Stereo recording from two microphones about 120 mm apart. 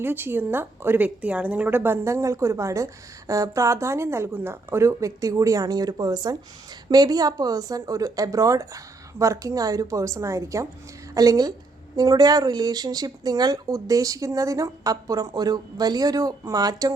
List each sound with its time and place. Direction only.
0.0 s a woman's voice: 15° right (ahead or behind)